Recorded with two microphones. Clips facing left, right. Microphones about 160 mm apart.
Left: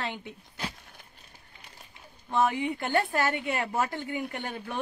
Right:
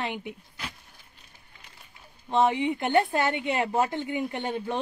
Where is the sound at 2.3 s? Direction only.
20° right (ahead or behind).